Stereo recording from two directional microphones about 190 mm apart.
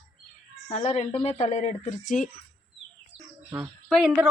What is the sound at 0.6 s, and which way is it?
Speech, 35° left (ahead or behind).